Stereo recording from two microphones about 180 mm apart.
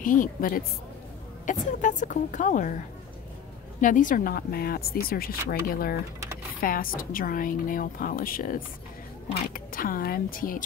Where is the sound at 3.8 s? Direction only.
45° left (ahead or behind).